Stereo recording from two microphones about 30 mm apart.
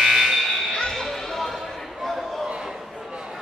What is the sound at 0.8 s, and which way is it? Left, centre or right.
Music, left.